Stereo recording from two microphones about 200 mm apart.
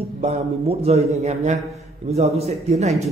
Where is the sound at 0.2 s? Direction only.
30° right (ahead or behind).